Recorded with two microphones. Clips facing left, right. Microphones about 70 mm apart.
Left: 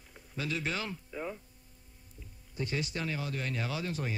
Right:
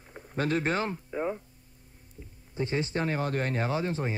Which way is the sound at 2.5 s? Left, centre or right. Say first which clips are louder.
Right 6 dB; right.